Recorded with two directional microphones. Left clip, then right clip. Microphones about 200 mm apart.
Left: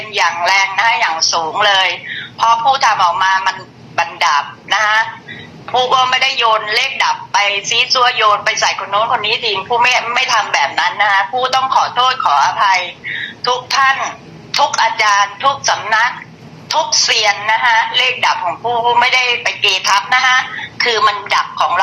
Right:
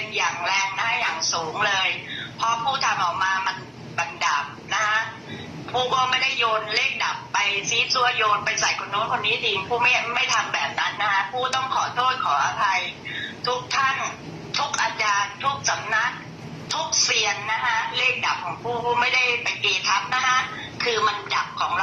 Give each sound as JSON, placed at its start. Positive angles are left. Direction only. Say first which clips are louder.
{"t": 0.1, "sound": "a man's voice", "louder": "left 11 dB", "side_deg": 45}
{"t": 4.7, "sound": "a man's voice", "louder": "left 10 dB", "side_deg": 45}